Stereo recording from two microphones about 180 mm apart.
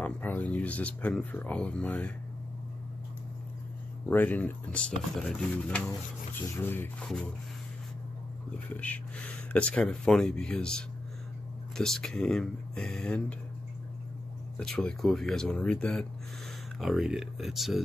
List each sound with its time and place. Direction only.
0.0 s speech: 10° left (ahead or behind)
4.1 s speech: 10° left (ahead or behind)
8.6 s speech: 10° left (ahead or behind)
14.6 s speech: 5° left (ahead or behind)